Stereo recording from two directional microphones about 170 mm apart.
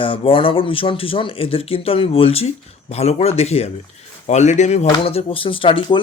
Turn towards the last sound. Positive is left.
turn(degrees=30)  # may be behind; listen again after turning